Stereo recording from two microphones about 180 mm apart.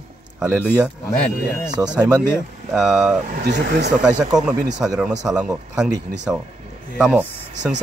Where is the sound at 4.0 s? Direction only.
5° right (ahead or behind).